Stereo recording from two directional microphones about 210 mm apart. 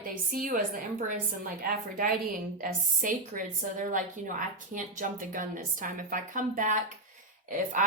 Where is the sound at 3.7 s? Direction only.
40° right (ahead or behind).